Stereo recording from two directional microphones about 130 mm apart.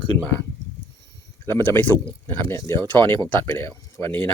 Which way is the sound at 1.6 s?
15° left (ahead or behind).